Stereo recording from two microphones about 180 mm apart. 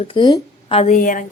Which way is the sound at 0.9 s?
45° left (ahead or behind).